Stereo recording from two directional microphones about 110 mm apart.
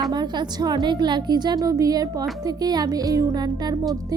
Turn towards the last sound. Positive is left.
turn(degrees=-35)  # may be behind; listen again after turning